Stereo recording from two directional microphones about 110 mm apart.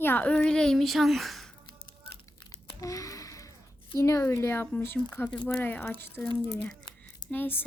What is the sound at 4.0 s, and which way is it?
Speech, 25° left (ahead or behind).